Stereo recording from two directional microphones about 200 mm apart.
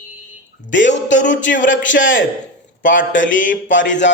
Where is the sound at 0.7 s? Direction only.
65° left (ahead or behind).